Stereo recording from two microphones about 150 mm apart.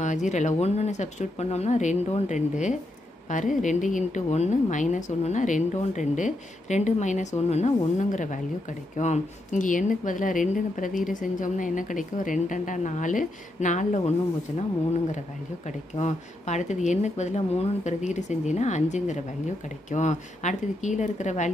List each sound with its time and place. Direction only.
0.0 s a woman's voice: 55° left (ahead or behind)
16.0 s speech: 50° left (ahead or behind)